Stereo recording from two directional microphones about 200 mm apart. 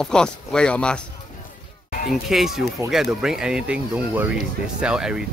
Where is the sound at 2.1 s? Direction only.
Centre (ahead or behind).